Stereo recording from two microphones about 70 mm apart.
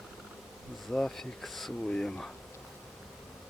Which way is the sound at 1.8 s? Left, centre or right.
Centre.